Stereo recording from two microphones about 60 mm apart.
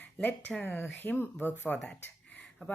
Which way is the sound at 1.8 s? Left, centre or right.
Left.